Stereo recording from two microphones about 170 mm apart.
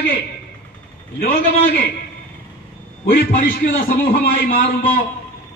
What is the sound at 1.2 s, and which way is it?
Speech, 55° left (ahead or behind).